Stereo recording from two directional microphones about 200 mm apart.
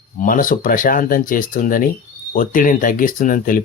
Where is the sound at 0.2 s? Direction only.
45° left (ahead or behind).